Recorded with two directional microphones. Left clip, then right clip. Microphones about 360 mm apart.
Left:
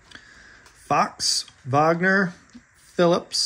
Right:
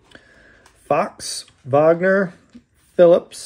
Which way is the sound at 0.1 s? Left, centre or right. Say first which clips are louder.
Left 1 dB; centre.